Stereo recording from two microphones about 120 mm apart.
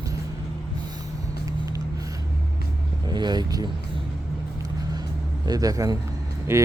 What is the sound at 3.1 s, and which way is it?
Speech, 35° right (ahead or behind).